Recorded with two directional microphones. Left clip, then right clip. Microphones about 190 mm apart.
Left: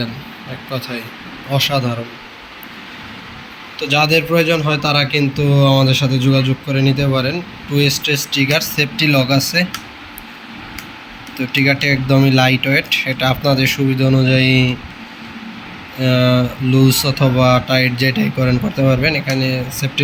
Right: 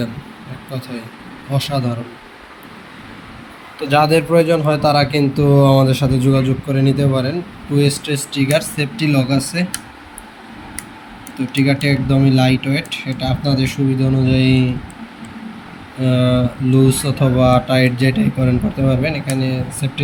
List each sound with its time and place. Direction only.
0.7 s speech: 10° right (ahead or behind)
3.8 s a man's voice: 15° right (ahead or behind)
11.3 s speech: 10° right (ahead or behind)
16.0 s speech: 10° right (ahead or behind)